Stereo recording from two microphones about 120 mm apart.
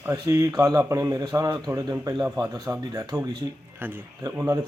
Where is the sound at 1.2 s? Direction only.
35° right (ahead or behind).